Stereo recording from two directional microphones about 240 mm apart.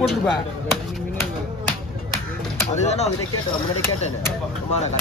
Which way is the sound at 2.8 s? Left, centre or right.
Left.